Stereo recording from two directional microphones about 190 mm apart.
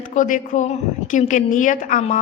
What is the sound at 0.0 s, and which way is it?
A woman's voice, 45° left (ahead or behind).